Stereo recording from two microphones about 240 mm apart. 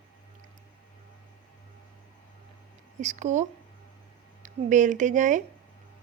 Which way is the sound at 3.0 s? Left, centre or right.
Right.